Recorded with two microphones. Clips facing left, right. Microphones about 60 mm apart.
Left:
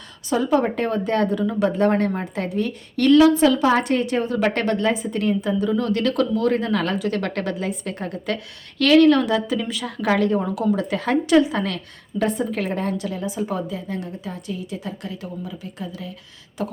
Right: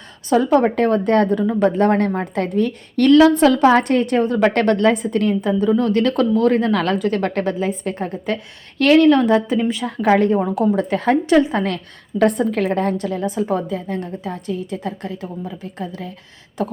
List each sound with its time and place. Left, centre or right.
0.3 s a woman's voice: right
12.2 s a woman's voice: right